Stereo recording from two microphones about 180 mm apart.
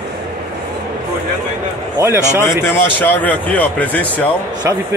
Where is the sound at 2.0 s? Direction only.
15° right (ahead or behind).